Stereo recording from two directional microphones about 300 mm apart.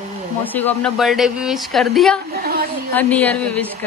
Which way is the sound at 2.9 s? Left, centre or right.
Centre.